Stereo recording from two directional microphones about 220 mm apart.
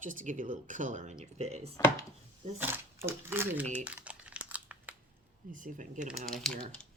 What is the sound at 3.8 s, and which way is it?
Crumpling, 5° right (ahead or behind).